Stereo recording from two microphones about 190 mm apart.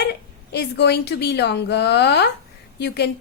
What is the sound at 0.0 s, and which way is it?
A woman's voice, 60° left (ahead or behind).